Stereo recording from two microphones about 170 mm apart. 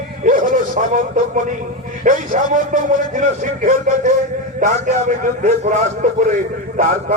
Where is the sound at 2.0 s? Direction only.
50° right (ahead or behind).